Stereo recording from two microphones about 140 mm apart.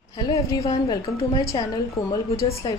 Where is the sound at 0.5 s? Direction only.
25° left (ahead or behind).